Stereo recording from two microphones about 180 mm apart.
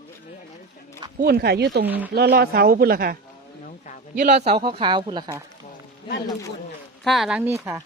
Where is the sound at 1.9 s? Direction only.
10° right (ahead or behind).